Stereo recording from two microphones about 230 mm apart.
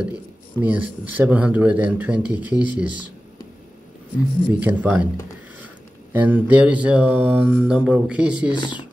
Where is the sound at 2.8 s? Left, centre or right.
Right.